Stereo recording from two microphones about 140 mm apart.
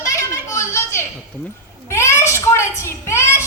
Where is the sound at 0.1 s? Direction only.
20° left (ahead or behind).